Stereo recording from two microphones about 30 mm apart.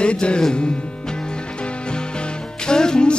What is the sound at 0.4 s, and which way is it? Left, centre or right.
Music, left.